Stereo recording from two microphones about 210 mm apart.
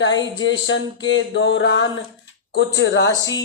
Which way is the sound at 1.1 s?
60° left (ahead or behind).